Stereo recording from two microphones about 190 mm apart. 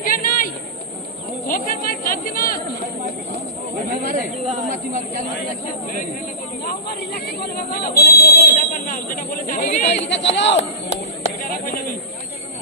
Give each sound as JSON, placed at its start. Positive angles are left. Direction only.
{"t": 0.0, "sound": "a sound", "side_deg": 45}
{"t": 4.0, "sound": "a woman's voice", "side_deg": -40}
{"t": 6.7, "sound": "speech", "side_deg": 55}
{"t": 10.0, "sound": "speech", "side_deg": 70}